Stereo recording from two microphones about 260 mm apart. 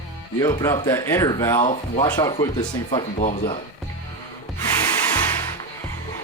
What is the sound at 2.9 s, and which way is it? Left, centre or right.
Speech, left.